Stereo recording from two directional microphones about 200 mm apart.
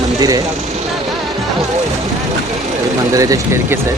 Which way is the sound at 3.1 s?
15° right (ahead or behind).